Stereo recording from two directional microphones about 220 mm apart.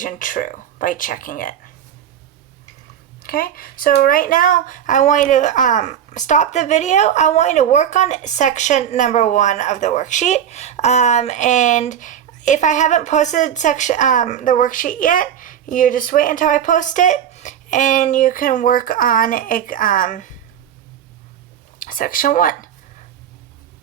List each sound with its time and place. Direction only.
0.0 s speech: 35° left (ahead or behind)
3.2 s speech: 40° left (ahead or behind)
21.8 s speech: 40° left (ahead or behind)